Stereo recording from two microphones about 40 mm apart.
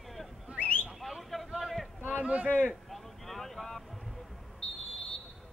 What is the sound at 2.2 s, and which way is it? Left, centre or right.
Speech, right.